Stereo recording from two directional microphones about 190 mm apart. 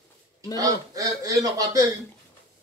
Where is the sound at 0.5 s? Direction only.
20° right (ahead or behind).